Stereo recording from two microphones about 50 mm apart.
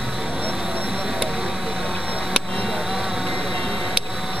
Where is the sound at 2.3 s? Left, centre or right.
Centre.